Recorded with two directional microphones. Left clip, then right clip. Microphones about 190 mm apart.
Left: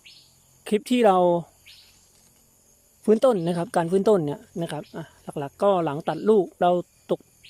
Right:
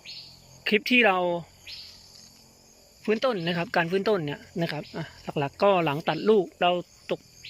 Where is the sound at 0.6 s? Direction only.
20° left (ahead or behind).